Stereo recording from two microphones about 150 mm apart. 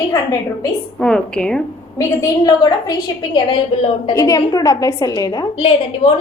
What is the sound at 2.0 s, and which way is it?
A woman's voice, 25° left (ahead or behind).